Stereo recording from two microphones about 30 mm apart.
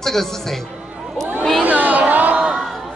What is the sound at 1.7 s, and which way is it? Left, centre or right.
Speech, right.